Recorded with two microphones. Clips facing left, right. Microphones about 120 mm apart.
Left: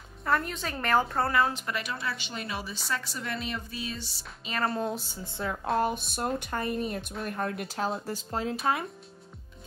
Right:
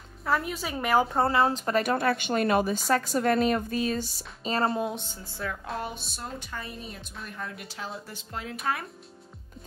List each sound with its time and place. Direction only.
0.2 s a woman's voice: 5° right (ahead or behind)
1.1 s speech: 25° right (ahead or behind)
1.5 s speech: 40° right (ahead or behind)
5.1 s a woman's voice: 20° left (ahead or behind)
5.8 s speech: 50° left (ahead or behind); by 8.8 s 30° left (ahead or behind)